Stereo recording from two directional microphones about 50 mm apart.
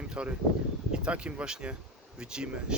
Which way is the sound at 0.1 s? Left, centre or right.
Right.